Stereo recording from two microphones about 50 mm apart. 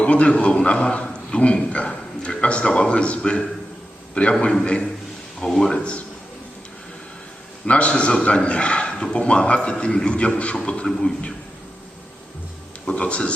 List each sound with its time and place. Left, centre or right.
0.0 s a man's voice: left
5.4 s speech: centre
5.7 s a man's voice: left
7.7 s a man's voice: left
10.8 s speech: centre
12.8 s a man's voice: left